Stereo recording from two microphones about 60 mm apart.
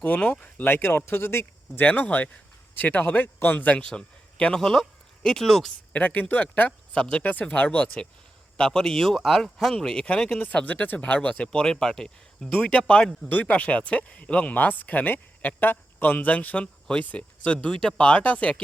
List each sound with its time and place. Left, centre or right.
0.0 s speech: left
0.7 s speech: left
1.8 s speech: left; by 5.7 s centre
5.9 s speech: left
8.5 s speech: centre
12.5 s speech: left